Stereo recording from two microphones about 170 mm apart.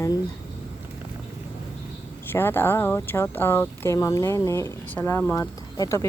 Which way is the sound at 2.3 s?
15° left (ahead or behind).